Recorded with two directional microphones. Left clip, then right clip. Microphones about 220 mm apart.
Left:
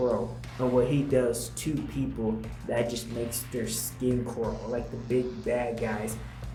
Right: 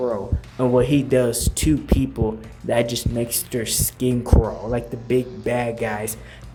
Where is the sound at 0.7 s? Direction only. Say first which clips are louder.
Right 7 dB; 45° right (ahead or behind).